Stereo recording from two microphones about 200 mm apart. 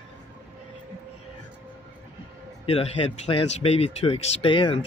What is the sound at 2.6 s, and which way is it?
Speech, 30° left (ahead or behind).